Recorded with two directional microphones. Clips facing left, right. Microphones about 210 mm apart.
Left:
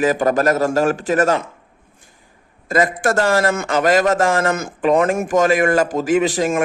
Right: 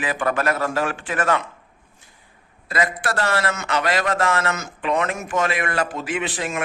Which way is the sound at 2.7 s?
45° left (ahead or behind).